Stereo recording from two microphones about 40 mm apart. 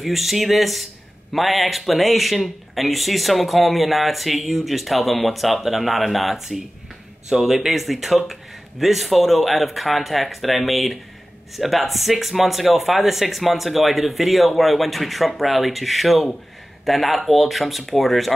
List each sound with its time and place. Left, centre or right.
0.0 s speech: centre